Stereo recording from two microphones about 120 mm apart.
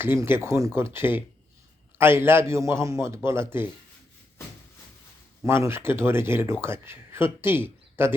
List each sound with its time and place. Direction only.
0.0 s speech: 20° right (ahead or behind)
5.4 s a man's voice: 20° right (ahead or behind)